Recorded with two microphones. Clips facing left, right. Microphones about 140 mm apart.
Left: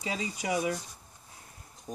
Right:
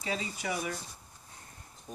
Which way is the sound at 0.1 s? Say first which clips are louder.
Left 2 dB; 20° left (ahead or behind).